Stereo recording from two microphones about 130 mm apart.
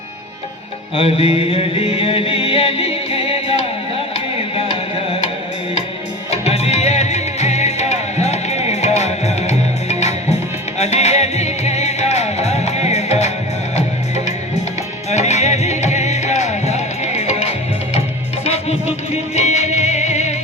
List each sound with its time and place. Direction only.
0.9 s music: 45° left (ahead or behind)
6.3 s music: 55° left (ahead or behind)
15.1 s music: 60° left (ahead or behind)